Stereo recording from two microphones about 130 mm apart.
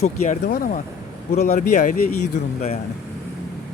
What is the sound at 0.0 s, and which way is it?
Speech, 65° left (ahead or behind).